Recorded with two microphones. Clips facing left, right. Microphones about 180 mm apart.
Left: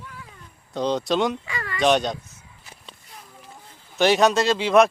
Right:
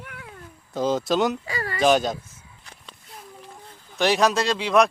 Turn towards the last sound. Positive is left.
turn(degrees=0)  # may be behind; listen again after turning